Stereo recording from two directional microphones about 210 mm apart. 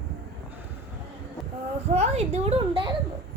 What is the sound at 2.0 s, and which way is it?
Speech, 30° right (ahead or behind).